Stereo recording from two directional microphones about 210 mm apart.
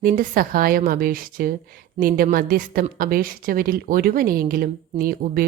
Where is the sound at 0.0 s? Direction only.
40° right (ahead or behind).